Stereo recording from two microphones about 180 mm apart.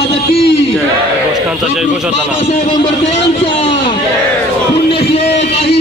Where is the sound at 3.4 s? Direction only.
35° left (ahead or behind).